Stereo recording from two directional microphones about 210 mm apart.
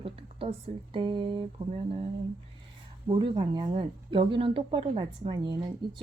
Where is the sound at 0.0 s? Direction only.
25° right (ahead or behind).